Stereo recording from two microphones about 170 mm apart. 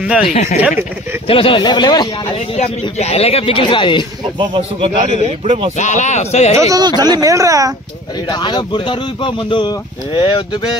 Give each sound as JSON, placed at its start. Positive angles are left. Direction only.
{"t": 0.2, "sound": "speech", "side_deg": 45}
{"t": 1.2, "sound": "speech", "side_deg": 30}
{"t": 2.5, "sound": "speech", "side_deg": 40}
{"t": 4.4, "sound": "a man's voice", "side_deg": -35}
{"t": 5.8, "sound": "speech", "side_deg": 45}
{"t": 6.5, "sound": "speech", "side_deg": -20}
{"t": 8.3, "sound": "speech", "side_deg": 25}